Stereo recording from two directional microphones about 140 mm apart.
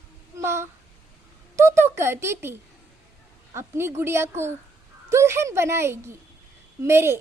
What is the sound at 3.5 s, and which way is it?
A woman's voice, 20° right (ahead or behind).